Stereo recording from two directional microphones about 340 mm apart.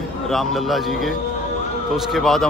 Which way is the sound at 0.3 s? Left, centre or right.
Centre.